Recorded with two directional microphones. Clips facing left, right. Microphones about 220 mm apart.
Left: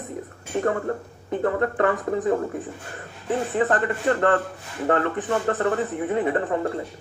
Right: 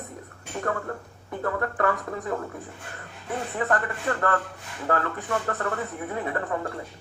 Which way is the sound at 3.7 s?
20° left (ahead or behind).